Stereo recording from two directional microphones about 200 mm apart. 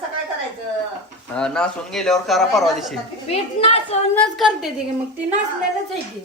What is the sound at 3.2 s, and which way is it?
Speech, 30° left (ahead or behind).